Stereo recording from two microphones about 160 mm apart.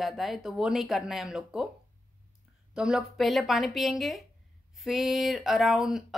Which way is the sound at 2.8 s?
Centre (ahead or behind).